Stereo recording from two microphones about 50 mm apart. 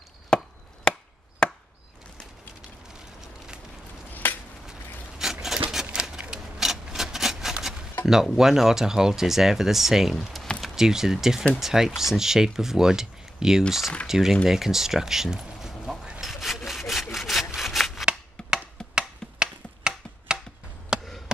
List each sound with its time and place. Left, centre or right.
0.3 s chop: centre
4.1 s a sound: left
5.2 s a sound: centre
5.9 s rub: centre
8.1 s speech: centre
10.8 s speech: centre
16.2 s sawing: centre
18.9 s tick-tock: centre
20.9 s chop: centre